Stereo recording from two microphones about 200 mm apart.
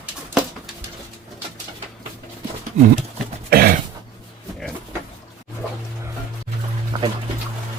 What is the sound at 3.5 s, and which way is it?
Throat clearing, 50° right (ahead or behind).